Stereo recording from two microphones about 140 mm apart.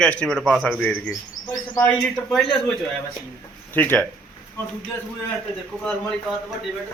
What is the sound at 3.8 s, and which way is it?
Speech, 10° left (ahead or behind).